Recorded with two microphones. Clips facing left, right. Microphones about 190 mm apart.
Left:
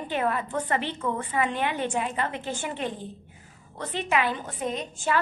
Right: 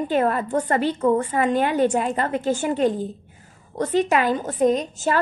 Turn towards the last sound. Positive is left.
turn(degrees=-40)  # may be behind; listen again after turning